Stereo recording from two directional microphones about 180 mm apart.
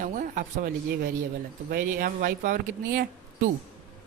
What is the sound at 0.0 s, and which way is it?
Speech, 45° right (ahead or behind).